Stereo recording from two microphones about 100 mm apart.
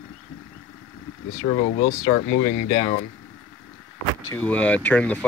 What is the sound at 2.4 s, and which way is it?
Speech, 50° left (ahead or behind).